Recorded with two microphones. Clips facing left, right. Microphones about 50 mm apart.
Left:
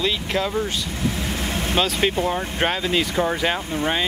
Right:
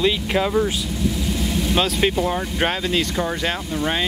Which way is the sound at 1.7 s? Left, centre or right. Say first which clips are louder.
Right 1 dB; centre.